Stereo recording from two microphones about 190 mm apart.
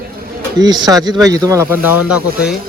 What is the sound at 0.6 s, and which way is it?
Speech, 20° right (ahead or behind).